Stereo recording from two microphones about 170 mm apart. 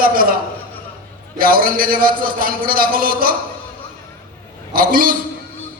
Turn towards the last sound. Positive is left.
turn(degrees=-55)  # may be behind; listen again after turning